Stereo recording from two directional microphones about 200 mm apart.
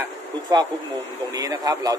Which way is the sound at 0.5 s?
20° right (ahead or behind).